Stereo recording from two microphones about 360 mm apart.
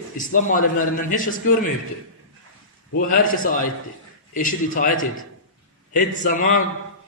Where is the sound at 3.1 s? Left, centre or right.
Left.